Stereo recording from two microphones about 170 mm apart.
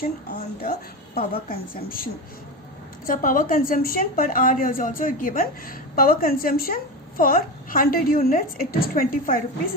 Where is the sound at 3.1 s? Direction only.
55° left (ahead or behind).